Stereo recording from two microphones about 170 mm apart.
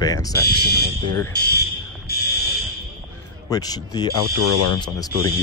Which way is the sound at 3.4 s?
20° left (ahead or behind).